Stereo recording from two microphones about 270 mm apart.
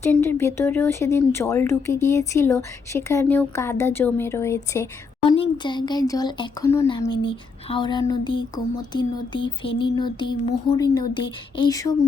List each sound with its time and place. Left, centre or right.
0.0 s speech: centre